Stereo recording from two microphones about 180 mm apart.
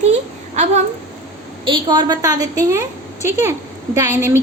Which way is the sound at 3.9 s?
15° right (ahead or behind).